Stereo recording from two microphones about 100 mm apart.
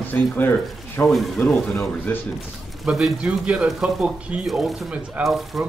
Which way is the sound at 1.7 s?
20° left (ahead or behind).